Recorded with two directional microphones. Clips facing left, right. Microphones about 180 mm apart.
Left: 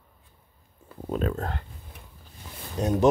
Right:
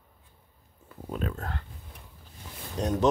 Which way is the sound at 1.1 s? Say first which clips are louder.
Left 6 dB; 40° left (ahead or behind).